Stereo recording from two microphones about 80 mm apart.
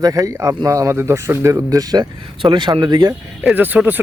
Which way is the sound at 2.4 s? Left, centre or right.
Right.